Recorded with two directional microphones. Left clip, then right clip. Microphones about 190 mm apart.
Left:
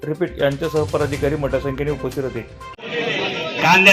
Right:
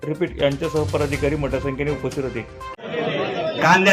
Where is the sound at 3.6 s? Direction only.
Centre (ahead or behind).